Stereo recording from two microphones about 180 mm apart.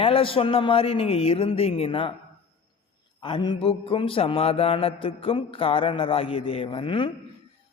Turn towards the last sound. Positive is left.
turn(degrees=30)  # may be behind; listen again after turning